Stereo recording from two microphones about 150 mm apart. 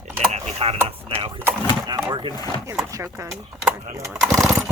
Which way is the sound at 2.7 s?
15° right (ahead or behind).